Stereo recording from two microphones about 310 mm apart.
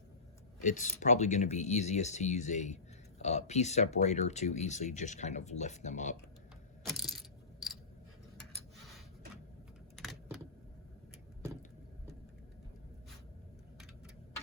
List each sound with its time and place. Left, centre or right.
0.6 s speech: left
6.8 s coin: centre
9.9 s computer keyboard: centre